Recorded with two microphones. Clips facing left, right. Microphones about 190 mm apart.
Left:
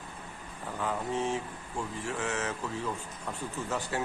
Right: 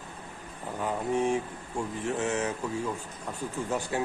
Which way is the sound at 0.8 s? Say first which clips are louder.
Right 4 dB; 15° right (ahead or behind).